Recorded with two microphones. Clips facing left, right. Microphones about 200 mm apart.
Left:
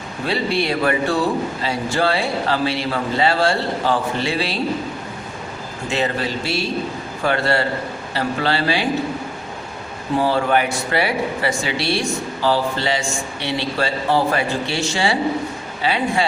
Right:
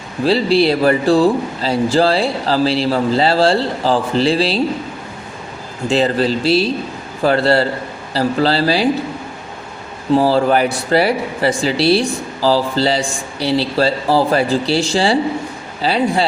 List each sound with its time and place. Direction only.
0.6 s a man's voice: 35° right (ahead or behind)
5.9 s a man's voice: 35° right (ahead or behind)
6.4 s a man's voice: 90° right
7.2 s a man's voice: 35° right (ahead or behind)
10.2 s a man's voice: 35° right (ahead or behind)